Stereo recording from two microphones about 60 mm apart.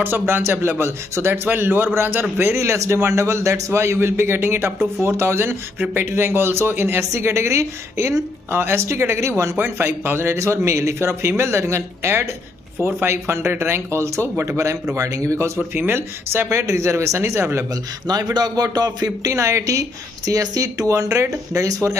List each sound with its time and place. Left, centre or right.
0.3 s a man's voice: right
10.3 s a woman's voice: right
15.7 s a man's voice: right
16.4 s a woman's voice: right
18.0 s a man's voice: right